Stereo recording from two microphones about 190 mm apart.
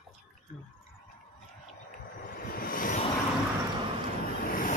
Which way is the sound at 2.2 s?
50° left (ahead or behind).